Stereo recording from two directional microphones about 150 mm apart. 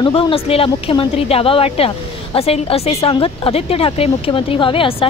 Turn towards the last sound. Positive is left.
turn(degrees=35)  # may be behind; listen again after turning